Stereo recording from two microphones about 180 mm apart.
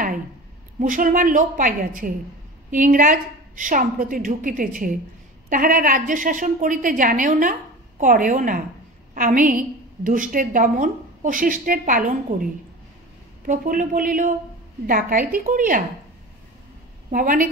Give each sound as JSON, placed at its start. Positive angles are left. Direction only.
{"t": 0.7, "sound": "a woman's voice", "side_deg": -45}
{"t": 13.5, "sound": "a woman's voice", "side_deg": -50}
{"t": 17.1, "sound": "a woman's voice", "side_deg": -50}